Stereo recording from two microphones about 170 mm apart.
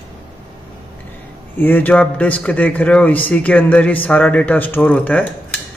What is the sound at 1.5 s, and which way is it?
A man's voice, 10° left (ahead or behind).